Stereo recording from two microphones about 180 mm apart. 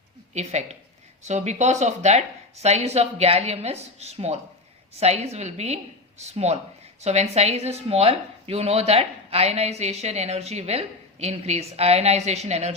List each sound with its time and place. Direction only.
0.3 s speech: 40° right (ahead or behind)